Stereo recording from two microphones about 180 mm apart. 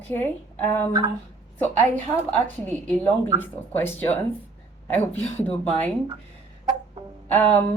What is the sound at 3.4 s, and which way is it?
A woman's voice, 10° left (ahead or behind).